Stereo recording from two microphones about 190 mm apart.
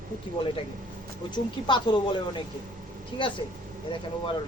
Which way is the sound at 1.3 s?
25° left (ahead or behind).